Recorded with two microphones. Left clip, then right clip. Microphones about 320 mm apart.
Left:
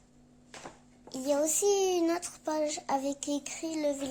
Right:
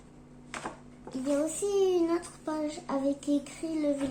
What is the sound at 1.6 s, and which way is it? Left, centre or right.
Child singing, left.